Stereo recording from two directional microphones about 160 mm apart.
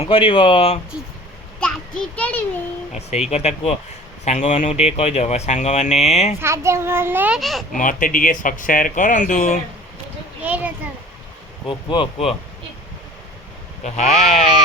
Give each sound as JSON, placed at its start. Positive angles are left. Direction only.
{"t": 0.0, "sound": "speech", "side_deg": 35}
{"t": 1.5, "sound": "a child's voice", "side_deg": 5}
{"t": 3.2, "sound": "speech", "side_deg": 40}
{"t": 6.4, "sound": "a child's voice", "side_deg": -15}
{"t": 7.3, "sound": "a child's voice", "side_deg": 0}
{"t": 7.8, "sound": "speech", "side_deg": 55}
{"t": 10.4, "sound": "a child's voice", "side_deg": -10}
{"t": 11.6, "sound": "speech", "side_deg": 30}
{"t": 13.8, "sound": "speech", "side_deg": 45}